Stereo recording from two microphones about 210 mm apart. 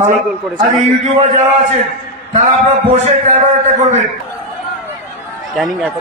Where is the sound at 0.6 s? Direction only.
35° right (ahead or behind).